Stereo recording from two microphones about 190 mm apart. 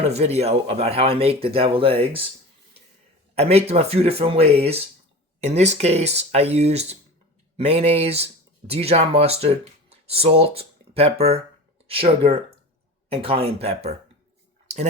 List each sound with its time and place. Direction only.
0.1 s speech: 35° right (ahead or behind)
3.3 s speech: 35° right (ahead or behind)